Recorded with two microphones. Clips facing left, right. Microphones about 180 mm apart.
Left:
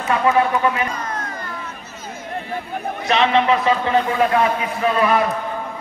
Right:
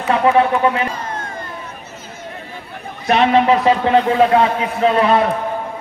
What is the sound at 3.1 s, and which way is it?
Speech, 45° right (ahead or behind).